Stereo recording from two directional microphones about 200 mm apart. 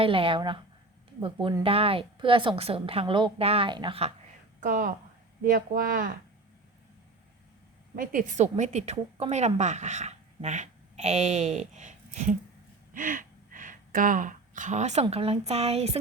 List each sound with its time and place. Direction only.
0.0 s a woman's voice: 25° right (ahead or behind)
5.5 s speech: 45° right (ahead or behind)
7.9 s a woman's voice: 40° right (ahead or behind)
12.9 s gasp: 40° right (ahead or behind)
15.0 s a woman's voice: 30° right (ahead or behind)